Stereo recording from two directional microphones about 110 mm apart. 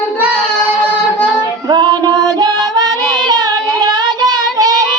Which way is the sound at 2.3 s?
35° right (ahead or behind).